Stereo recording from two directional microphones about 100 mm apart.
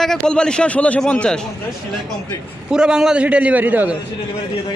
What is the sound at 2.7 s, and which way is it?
A man's voice, 5° right (ahead or behind).